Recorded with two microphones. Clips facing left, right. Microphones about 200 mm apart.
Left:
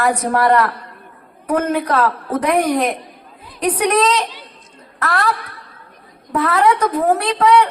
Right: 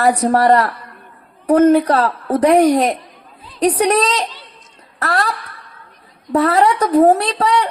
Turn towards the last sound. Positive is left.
turn(degrees=-35)  # may be behind; listen again after turning